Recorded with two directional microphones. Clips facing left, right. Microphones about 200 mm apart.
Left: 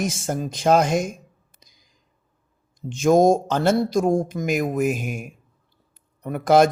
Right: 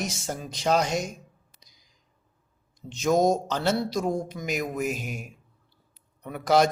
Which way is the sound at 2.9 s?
50° left (ahead or behind).